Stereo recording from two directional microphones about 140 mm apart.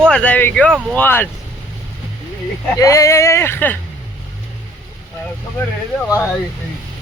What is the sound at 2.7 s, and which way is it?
Speech, 25° left (ahead or behind).